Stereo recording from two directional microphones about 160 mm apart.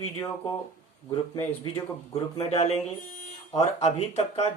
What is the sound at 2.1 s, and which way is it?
Speech, 40° left (ahead or behind).